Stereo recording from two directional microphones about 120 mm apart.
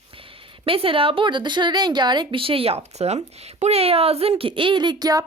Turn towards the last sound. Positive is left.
turn(degrees=-35)  # may be behind; listen again after turning